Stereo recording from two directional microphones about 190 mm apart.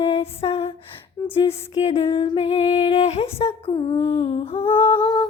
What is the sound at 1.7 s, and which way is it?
Music, 35° left (ahead or behind).